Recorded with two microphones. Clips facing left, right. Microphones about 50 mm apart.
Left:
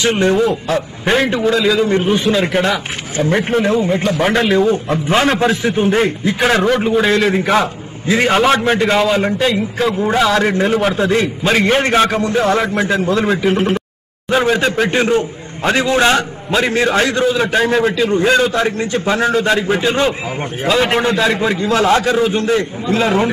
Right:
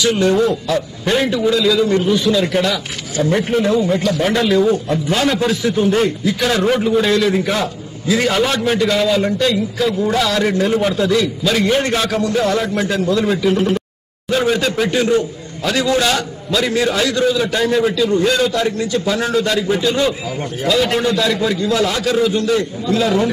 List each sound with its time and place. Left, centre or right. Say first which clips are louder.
0.0 s a man's voice: left 1 dB; left
14.3 s a man's voice: left 2 dB; left